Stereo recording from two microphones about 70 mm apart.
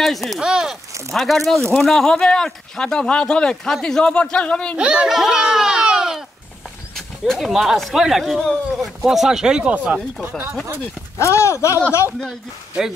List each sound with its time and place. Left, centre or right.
0.0 s speech: centre
0.4 s speech: centre
1.1 s speech: centre
4.7 s speech: centre
5.1 s a sound: centre
7.0 s speech: centre
10.2 s speech: right
11.1 s speech: left